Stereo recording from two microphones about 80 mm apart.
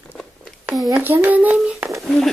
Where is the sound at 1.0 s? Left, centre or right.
Right.